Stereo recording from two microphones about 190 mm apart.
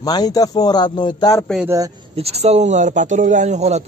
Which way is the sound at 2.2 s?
35° right (ahead or behind).